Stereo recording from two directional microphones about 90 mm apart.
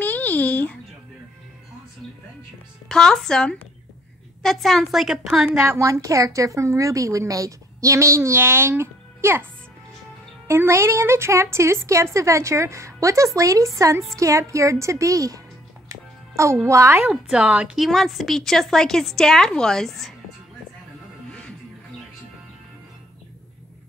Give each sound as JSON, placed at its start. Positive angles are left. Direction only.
{"t": 0.0, "sound": "a sound", "side_deg": 20}
{"t": 2.9, "sound": "a woman's voice", "side_deg": 5}
{"t": 5.4, "sound": "a woman's voice", "side_deg": -20}
{"t": 5.8, "sound": "a woman's voice", "side_deg": -35}
{"t": 10.5, "sound": "a woman's voice", "side_deg": -30}
{"t": 16.6, "sound": "a woman's voice", "side_deg": -35}
{"t": 17.0, "sound": "a woman's voice", "side_deg": -5}
{"t": 17.7, "sound": "a woman's voice", "side_deg": 0}